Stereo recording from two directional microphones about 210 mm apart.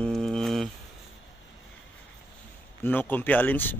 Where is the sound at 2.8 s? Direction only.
10° left (ahead or behind).